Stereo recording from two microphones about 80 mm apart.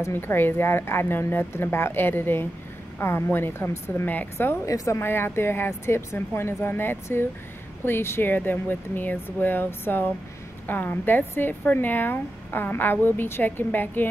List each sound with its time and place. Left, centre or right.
0.1 s speech: left
4.6 s speech: left